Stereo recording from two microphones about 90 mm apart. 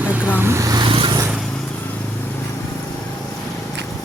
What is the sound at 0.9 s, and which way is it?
Vehicle, 75° right (ahead or behind).